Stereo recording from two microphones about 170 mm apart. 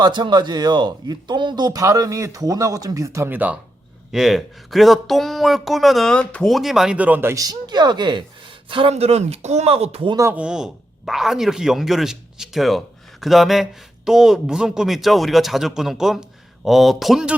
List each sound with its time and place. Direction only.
0.0 s speech: 25° right (ahead or behind)
10.2 s speech: 10° right (ahead or behind)